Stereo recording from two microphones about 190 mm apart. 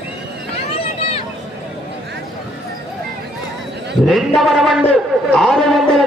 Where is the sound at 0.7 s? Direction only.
30° left (ahead or behind).